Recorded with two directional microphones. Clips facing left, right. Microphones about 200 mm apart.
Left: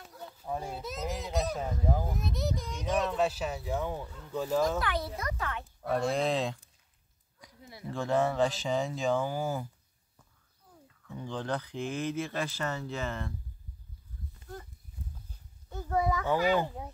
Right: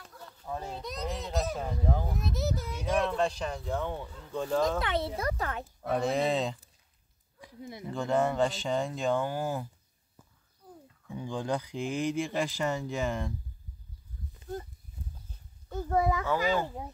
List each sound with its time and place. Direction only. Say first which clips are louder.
0.2 s a child's voice: left 2 dB; 10° left (ahead or behind); by 3.1 s 5° right (ahead or behind)
3.1 s a child's voice: even; 5° left (ahead or behind)
4.6 s a child's voice: right 1 dB; 25° right (ahead or behind)
5.8 s a child's voice: right 1 dB; 5° right (ahead or behind)
7.9 s a child's voice: even; centre (ahead or behind)
11.1 s speech: right 2 dB; 10° right (ahead or behind)
14.4 s a sound: right 7 dB; 25° right (ahead or behind)
15.9 s a child's voice: right 2 dB; 25° right (ahead or behind)
16.3 s speech: left 1 dB; 15° left (ahead or behind)